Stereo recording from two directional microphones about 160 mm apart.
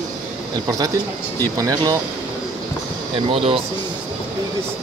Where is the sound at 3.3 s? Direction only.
35° right (ahead or behind).